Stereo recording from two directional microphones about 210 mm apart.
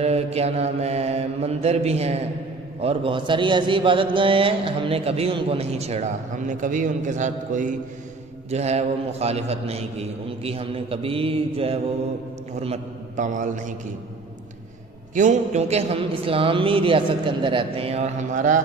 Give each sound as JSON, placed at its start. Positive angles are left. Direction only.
{"t": 0.0, "sound": "a man's voice", "side_deg": -30}
{"t": 15.1, "sound": "a man's voice", "side_deg": -35}